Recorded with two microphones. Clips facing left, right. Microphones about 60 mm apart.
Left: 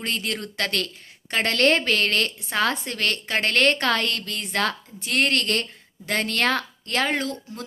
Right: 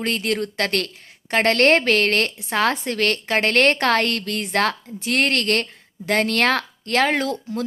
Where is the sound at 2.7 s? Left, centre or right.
Right.